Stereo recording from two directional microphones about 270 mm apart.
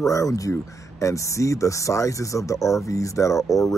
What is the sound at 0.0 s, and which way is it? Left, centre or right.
Speech, centre.